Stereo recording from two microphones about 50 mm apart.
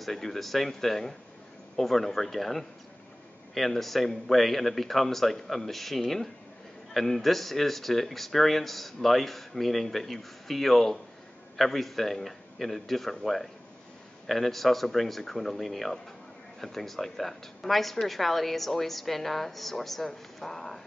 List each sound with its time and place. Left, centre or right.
0.0 s speech: centre